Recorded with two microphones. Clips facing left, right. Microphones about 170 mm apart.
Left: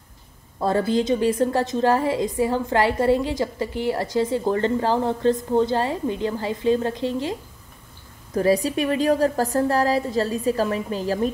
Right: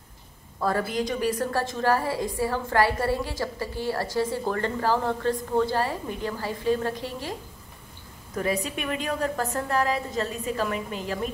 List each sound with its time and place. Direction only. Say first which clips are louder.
0.6 s a woman's voice: left 5 dB; 25° left (ahead or behind)
8.4 s a woman's voice: left 8 dB; 35° left (ahead or behind)